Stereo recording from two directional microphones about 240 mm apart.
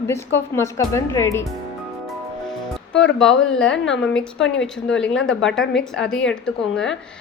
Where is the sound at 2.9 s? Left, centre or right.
Left.